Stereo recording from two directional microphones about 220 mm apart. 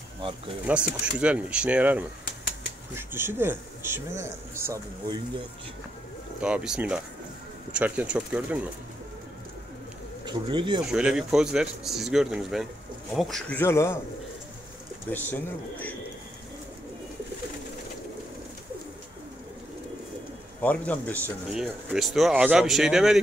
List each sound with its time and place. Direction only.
0.7 s speech: 5° right (ahead or behind)
6.4 s speech: 5° right (ahead or behind)
10.2 s speech: 20° right (ahead or behind)
10.9 s speech: 5° right (ahead or behind)
15.0 s speech: 10° left (ahead or behind)
20.6 s speech: 5° left (ahead or behind)
21.5 s speech: 5° right (ahead or behind)